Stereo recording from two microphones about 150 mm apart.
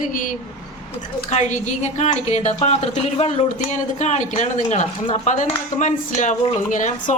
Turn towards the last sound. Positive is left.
turn(degrees=60)  # may be behind; listen again after turning